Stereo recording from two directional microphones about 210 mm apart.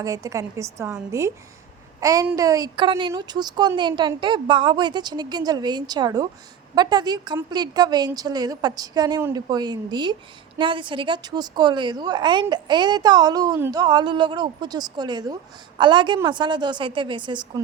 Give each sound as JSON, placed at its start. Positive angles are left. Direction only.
{"t": 0.0, "sound": "a woman's voice", "side_deg": -15}